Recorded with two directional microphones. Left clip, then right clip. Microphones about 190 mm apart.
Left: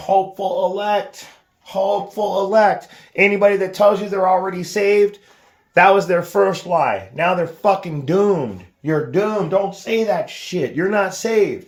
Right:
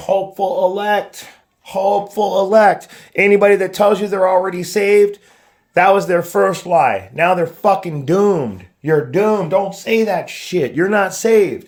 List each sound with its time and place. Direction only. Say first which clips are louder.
0.3 s speech: right 3 dB; 50° right (ahead or behind)
2.1 s speech: right 3 dB; 55° right (ahead or behind)
5.7 s speech: right 1 dB; 25° right (ahead or behind)
8.8 s speech: right 4 dB; 65° right (ahead or behind); by 11.4 s 45° right (ahead or behind)